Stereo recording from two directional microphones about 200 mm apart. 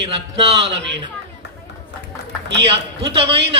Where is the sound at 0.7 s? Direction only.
60° right (ahead or behind).